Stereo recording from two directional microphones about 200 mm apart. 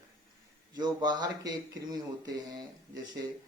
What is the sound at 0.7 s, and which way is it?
Speech, 20° right (ahead or behind).